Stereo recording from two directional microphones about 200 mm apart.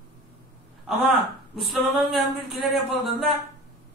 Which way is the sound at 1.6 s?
Centre (ahead or behind).